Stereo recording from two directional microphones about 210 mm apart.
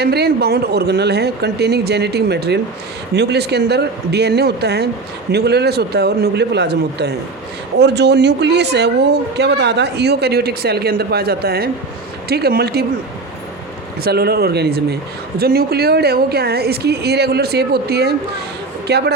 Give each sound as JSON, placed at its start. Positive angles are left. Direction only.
{"t": 0.0, "sound": "speech", "side_deg": -50}
{"t": 14.0, "sound": "speech", "side_deg": -50}